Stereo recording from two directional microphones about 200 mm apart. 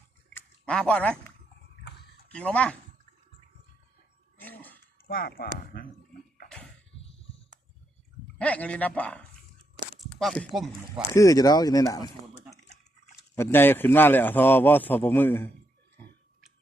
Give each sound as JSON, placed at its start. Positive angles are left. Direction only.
{"t": 0.3, "sound": "a sound", "side_deg": 5}
{"t": 2.3, "sound": "speech", "side_deg": 5}
{"t": 4.4, "sound": "a sound", "side_deg": 10}
{"t": 5.0, "sound": "speech", "side_deg": 50}
{"t": 8.4, "sound": "a man's voice", "side_deg": 5}
{"t": 11.1, "sound": "a man's voice", "side_deg": 15}
{"t": 13.3, "sound": "a man's voice", "side_deg": 10}